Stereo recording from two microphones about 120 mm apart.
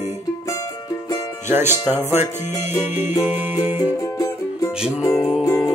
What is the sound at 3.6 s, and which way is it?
Music, 15° right (ahead or behind).